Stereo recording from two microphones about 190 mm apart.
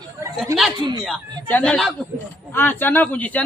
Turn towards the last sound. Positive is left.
turn(degrees=10)  # may be behind; listen again after turning